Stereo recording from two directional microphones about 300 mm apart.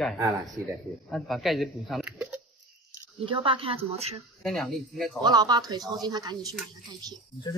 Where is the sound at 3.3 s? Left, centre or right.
Centre.